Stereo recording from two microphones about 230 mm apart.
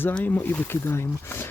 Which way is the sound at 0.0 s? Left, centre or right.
Centre.